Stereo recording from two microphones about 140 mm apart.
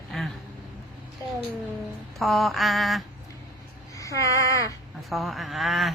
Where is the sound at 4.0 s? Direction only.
25° left (ahead or behind).